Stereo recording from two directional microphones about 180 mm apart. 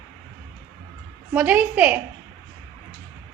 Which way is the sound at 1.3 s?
10° right (ahead or behind).